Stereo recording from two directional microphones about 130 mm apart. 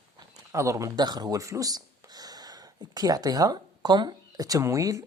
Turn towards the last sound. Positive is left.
turn(degrees=-25)  # may be behind; listen again after turning